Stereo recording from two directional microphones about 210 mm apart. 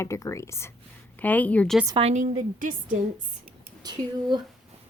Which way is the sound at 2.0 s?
35° right (ahead or behind).